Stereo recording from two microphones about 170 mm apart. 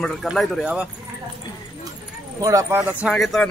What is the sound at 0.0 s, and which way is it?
Speech, centre (ahead or behind).